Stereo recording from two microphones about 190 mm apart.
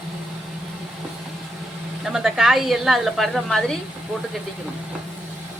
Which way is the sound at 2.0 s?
5° right (ahead or behind).